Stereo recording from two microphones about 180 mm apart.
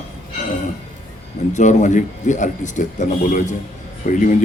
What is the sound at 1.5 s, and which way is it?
Speech, 40° left (ahead or behind).